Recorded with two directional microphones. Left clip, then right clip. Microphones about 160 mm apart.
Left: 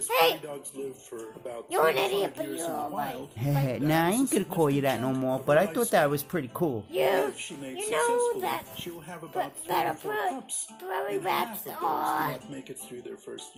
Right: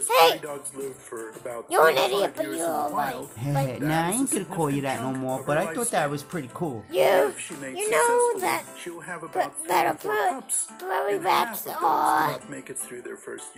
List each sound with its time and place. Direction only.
0.1 s a sound: 40° right (ahead or behind)
1.7 s speech: 40° right (ahead or behind)
3.4 s speech: 55° left (ahead or behind)
6.9 s speech: 40° right (ahead or behind)